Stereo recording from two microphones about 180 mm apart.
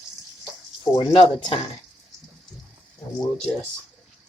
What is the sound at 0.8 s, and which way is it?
Speech, 30° left (ahead or behind).